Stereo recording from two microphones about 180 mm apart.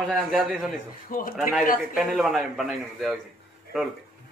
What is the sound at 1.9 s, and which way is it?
A man's voice, 5° right (ahead or behind).